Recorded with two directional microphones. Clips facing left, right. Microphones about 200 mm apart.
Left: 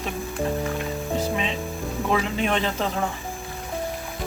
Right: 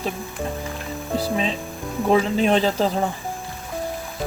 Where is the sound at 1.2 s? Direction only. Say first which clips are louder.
Right 4 dB; 35° right (ahead or behind).